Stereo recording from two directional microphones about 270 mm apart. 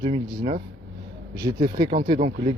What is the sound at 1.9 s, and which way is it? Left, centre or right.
Speech, right.